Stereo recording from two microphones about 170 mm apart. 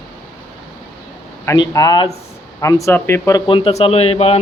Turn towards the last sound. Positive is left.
turn(degrees=35)  # may be behind; listen again after turning